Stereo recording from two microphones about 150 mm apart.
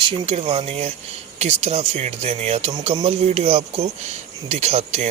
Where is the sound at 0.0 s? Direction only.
40° right (ahead or behind).